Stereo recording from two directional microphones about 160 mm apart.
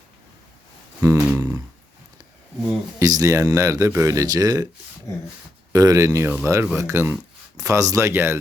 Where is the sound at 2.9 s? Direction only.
20° right (ahead or behind).